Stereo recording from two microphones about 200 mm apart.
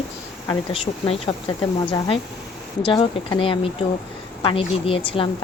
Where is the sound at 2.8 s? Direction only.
25° left (ahead or behind).